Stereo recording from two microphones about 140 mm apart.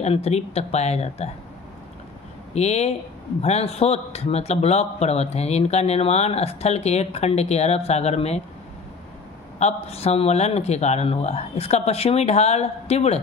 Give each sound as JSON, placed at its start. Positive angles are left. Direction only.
{"t": 0.0, "sound": "a man's voice", "side_deg": 50}
{"t": 2.5, "sound": "a man's voice", "side_deg": 50}
{"t": 9.6, "sound": "a man's voice", "side_deg": 50}